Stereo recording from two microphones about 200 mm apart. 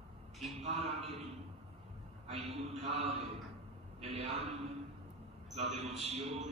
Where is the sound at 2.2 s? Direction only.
30° right (ahead or behind).